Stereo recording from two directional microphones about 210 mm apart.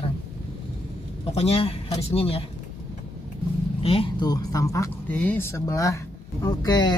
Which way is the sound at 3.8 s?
25° left (ahead or behind).